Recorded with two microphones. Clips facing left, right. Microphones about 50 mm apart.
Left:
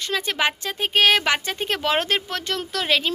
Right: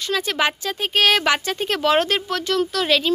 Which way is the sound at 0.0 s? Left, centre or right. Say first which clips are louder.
Right 2 dB; left.